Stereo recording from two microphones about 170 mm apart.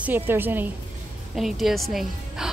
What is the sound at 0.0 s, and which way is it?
Speech, 10° right (ahead or behind).